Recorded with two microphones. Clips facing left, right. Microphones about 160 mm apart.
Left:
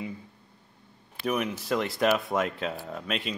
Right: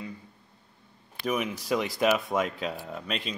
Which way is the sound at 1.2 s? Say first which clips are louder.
Left 1 dB; centre (ahead or behind).